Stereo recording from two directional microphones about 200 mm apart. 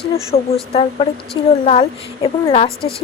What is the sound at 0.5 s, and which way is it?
Speech, 30° left (ahead or behind).